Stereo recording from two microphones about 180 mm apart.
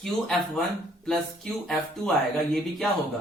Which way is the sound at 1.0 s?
Centre (ahead or behind).